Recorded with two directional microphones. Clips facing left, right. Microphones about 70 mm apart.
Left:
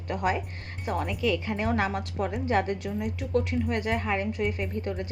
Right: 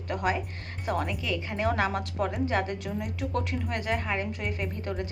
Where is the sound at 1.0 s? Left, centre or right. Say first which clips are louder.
Left 4 dB; right.